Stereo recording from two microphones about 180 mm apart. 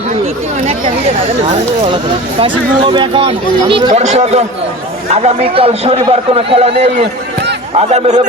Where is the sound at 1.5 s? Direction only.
30° right (ahead or behind).